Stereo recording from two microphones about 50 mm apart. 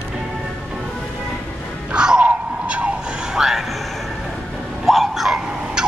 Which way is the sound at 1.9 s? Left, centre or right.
Centre.